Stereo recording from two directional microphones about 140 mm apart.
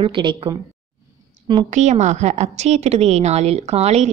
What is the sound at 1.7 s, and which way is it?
A woman's voice, 55° right (ahead or behind).